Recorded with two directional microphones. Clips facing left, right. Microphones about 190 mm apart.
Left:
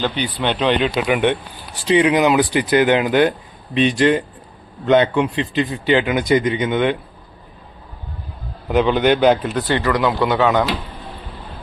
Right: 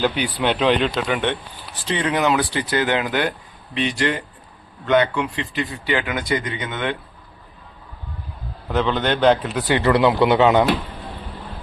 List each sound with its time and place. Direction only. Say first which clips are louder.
0.0 s speech: even; 5° right (ahead or behind)
0.9 s speech: left 5 dB; 10° left (ahead or behind)
8.6 s speech: left 5 dB; 10° left (ahead or behind)
9.8 s speech: right 5 dB; 25° right (ahead or behind)